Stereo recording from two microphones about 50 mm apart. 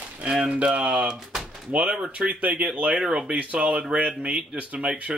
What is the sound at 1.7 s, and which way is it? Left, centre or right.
Speech, right.